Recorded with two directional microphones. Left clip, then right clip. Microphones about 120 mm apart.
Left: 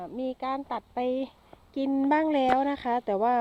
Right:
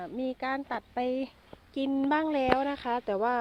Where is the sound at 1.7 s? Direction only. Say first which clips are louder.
Left 2 dB; 35° left (ahead or behind).